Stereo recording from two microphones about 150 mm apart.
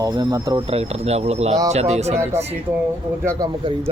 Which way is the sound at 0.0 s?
25° right (ahead or behind).